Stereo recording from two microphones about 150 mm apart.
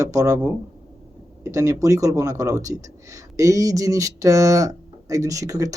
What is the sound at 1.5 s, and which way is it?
Speech, 20° right (ahead or behind).